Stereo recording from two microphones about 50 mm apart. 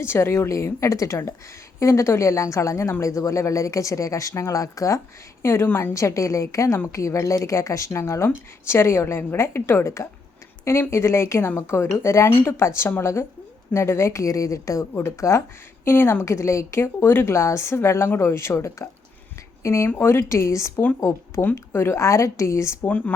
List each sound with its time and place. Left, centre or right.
0.0 s speech: left
5.4 s a woman's voice: left
5.9 s speech: left
15.8 s speech: left
17.3 s speech: left
19.6 s speech: left
20.0 s speech: left
21.5 s speech: left
22.8 s speech: left